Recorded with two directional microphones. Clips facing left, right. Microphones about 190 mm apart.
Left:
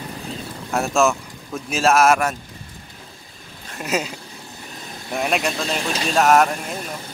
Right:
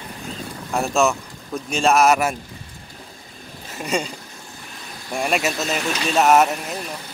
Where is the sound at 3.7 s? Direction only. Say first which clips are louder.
Even; centre (ahead or behind).